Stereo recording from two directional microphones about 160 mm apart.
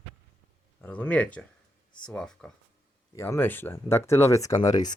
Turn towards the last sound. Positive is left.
turn(degrees=20)  # may be behind; listen again after turning